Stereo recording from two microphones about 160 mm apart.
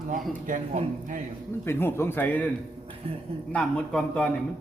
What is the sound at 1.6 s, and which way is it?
Speech, 15° left (ahead or behind).